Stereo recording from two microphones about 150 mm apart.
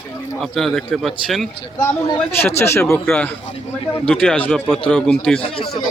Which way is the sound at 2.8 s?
15° left (ahead or behind).